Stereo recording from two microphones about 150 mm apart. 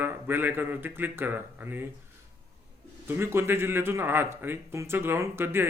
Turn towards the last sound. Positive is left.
turn(degrees=-15)  # may be behind; listen again after turning